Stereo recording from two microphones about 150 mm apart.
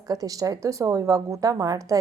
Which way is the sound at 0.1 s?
25° right (ahead or behind).